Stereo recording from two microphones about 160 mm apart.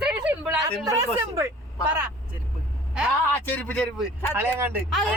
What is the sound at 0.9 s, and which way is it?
Speech, 20° right (ahead or behind).